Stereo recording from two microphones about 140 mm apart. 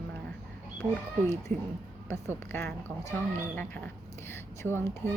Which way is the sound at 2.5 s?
20° left (ahead or behind).